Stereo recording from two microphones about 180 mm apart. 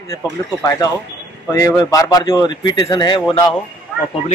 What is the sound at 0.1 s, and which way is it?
Speech, 20° left (ahead or behind).